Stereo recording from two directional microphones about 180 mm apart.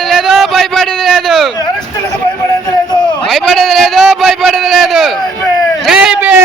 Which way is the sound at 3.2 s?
Centre (ahead or behind).